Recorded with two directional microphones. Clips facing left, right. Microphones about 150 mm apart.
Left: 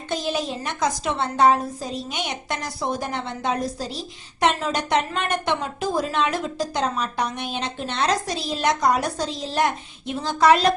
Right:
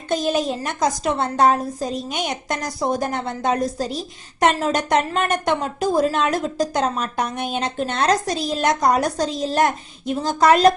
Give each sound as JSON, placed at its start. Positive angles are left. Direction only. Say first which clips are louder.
{"t": 0.1, "sound": "a woman's voice", "louder": "right 5 dB", "side_deg": -50}